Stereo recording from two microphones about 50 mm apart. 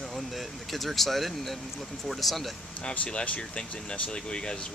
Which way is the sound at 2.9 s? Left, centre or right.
Centre.